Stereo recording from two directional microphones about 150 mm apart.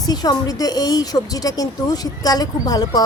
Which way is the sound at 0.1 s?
25° left (ahead or behind).